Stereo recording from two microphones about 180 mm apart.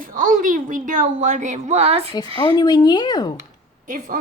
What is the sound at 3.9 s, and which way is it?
Speech, 45° right (ahead or behind).